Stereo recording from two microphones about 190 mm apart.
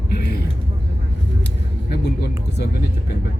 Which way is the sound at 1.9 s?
60° left (ahead or behind).